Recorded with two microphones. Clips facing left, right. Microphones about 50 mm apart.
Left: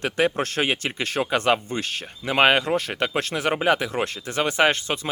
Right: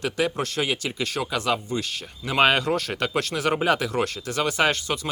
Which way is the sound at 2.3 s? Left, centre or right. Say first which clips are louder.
Left 1 dB; left.